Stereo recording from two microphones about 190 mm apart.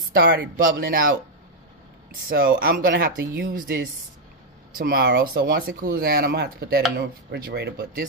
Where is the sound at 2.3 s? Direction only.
50° right (ahead or behind).